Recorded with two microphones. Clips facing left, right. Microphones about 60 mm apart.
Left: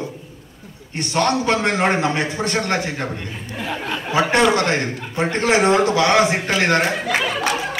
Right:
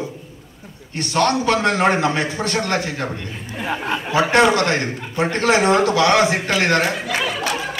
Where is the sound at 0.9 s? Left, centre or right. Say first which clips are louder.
Right 1 dB; left.